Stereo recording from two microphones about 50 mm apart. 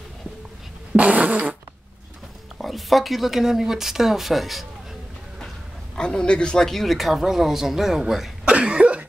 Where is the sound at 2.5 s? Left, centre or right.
Centre.